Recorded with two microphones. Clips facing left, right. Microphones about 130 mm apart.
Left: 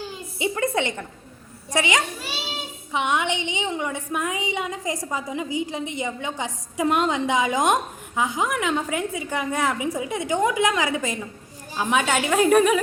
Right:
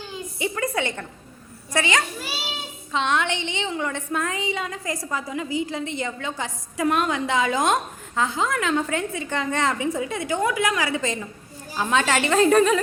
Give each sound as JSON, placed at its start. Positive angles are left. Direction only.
{"t": 0.3, "sound": "a woman's voice", "side_deg": 20}